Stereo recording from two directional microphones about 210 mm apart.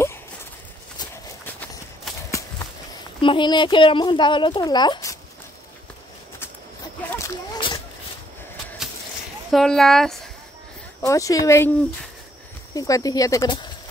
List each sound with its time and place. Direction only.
0.9 s clip-clop: 10° left (ahead or behind)
3.2 s a child's voice: 25° left (ahead or behind)
7.1 s a sound: 15° left (ahead or behind)
9.5 s speech: centre (ahead or behind)
11.1 s speech: 15° left (ahead or behind)
12.7 s speech: 15° left (ahead or behind)